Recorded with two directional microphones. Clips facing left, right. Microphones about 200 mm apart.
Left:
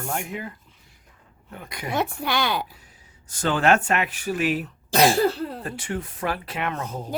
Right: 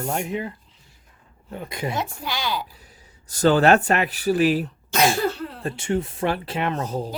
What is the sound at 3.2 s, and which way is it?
Speech, 40° right (ahead or behind).